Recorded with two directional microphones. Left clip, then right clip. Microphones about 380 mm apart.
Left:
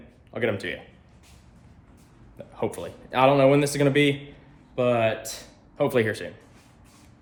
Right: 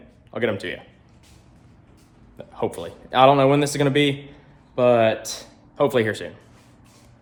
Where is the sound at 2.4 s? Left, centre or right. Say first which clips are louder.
Right 3 dB; centre.